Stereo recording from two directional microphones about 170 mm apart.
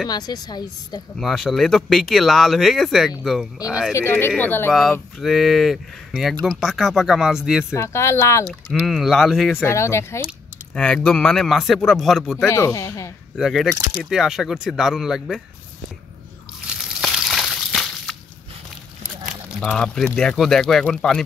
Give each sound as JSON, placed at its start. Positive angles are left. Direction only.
{"t": 0.1, "sound": "a woman's voice", "side_deg": 25}
{"t": 1.1, "sound": "speech", "side_deg": 0}
{"t": 3.6, "sound": "a woman's voice", "side_deg": 20}
{"t": 7.7, "sound": "speech", "side_deg": 15}
{"t": 8.5, "sound": "speech", "side_deg": 0}
{"t": 9.6, "sound": "speech", "side_deg": 15}
{"t": 12.4, "sound": "a woman's voice", "side_deg": 20}
{"t": 13.4, "sound": "speech", "side_deg": 0}
{"t": 16.6, "sound": "slosh", "side_deg": 0}
{"t": 19.6, "sound": "speech", "side_deg": 5}